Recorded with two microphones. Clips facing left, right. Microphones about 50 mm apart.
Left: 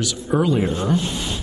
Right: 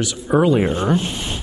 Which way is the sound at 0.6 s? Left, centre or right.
Right.